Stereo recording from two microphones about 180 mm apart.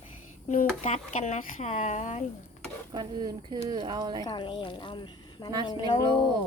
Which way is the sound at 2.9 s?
25° right (ahead or behind).